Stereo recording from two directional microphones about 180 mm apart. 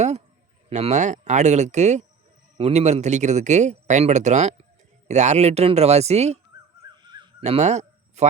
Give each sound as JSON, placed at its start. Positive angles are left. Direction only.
{"t": 0.7, "sound": "speech", "side_deg": -40}
{"t": 6.9, "sound": "goose", "side_deg": -25}
{"t": 7.4, "sound": "speech", "side_deg": -40}